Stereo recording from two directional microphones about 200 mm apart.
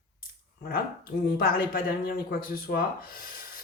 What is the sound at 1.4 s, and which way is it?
A woman's voice, 50° left (ahead or behind).